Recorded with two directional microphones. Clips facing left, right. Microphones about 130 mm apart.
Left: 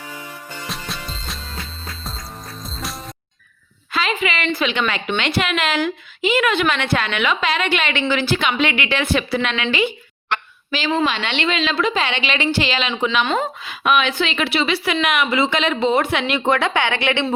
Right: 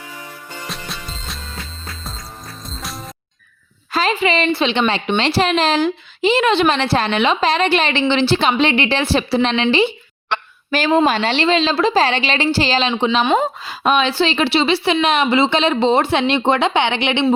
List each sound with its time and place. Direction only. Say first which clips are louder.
0.7 s music: left 1 dB; centre (ahead or behind)
2.8 s music: even; centre (ahead or behind)
3.9 s a woman's voice: right 5 dB; 35° right (ahead or behind)
10.7 s a woman's voice: right 5 dB; 45° right (ahead or behind); by 17.2 s 20° right (ahead or behind)